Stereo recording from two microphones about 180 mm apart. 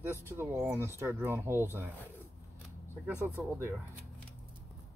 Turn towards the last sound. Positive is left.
turn(degrees=-15)  # may be behind; listen again after turning